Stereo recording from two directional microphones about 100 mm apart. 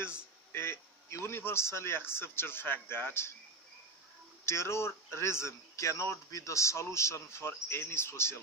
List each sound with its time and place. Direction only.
0.5 s a man's voice: 25° left (ahead or behind)
4.5 s a man's voice: 25° left (ahead or behind)